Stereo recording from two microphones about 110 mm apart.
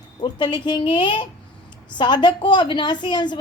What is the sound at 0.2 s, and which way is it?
A woman's voice, 45° left (ahead or behind).